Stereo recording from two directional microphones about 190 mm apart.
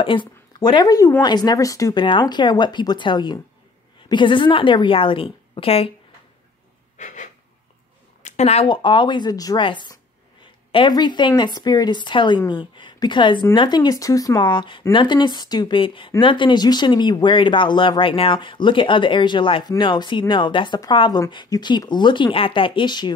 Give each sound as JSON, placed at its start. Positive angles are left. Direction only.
{"t": 0.0, "sound": "speech", "side_deg": 25}
{"t": 7.0, "sound": "a sound", "side_deg": 40}
{"t": 8.2, "sound": "speech", "side_deg": 35}